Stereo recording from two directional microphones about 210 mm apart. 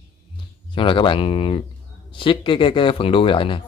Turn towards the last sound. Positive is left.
turn(degrees=25)  # may be behind; listen again after turning